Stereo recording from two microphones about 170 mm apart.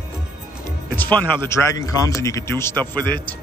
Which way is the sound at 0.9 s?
10° left (ahead or behind).